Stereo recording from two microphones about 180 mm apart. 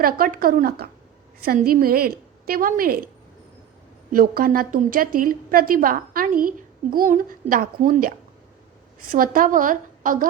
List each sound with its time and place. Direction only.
0.0 s a woman's voice: 50° right (ahead or behind)
4.1 s a woman's voice: 50° right (ahead or behind)